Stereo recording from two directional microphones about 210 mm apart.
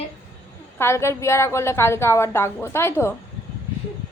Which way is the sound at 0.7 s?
10° left (ahead or behind).